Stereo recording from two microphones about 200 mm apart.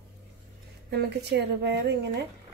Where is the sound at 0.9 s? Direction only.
55° right (ahead or behind).